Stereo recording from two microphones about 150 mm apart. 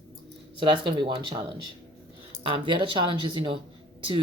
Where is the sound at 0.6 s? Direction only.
30° right (ahead or behind).